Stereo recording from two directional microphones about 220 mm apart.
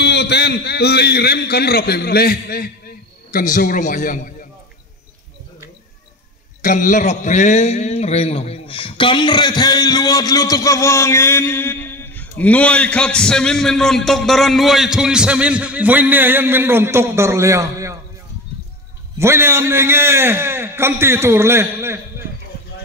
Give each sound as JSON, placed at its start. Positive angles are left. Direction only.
{"t": 0.0, "sound": "a man's voice", "side_deg": 50}
{"t": 6.6, "sound": "a man's voice", "side_deg": 35}
{"t": 19.1, "sound": "a man's voice", "side_deg": -10}